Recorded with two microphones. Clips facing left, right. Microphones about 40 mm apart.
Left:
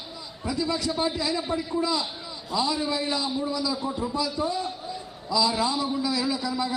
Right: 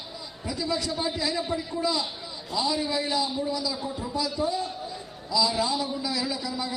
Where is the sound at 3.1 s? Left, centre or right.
Centre.